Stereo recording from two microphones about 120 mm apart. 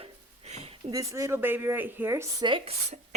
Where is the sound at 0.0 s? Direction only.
65° right (ahead or behind).